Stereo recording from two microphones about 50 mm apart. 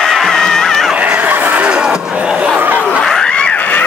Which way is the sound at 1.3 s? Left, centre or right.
Right.